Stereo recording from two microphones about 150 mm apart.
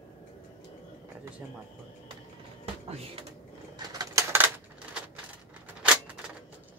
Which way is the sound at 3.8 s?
25° right (ahead or behind).